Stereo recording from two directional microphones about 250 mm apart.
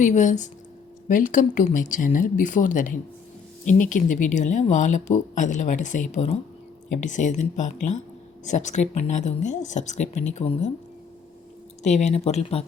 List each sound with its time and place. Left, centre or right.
0.0 s speech: left
11.8 s speech: left